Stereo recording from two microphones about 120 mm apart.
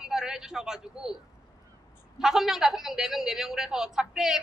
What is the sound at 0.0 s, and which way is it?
Speech, 5° right (ahead or behind).